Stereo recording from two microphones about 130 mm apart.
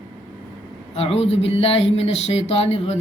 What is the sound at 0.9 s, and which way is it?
Speech, 50° left (ahead or behind).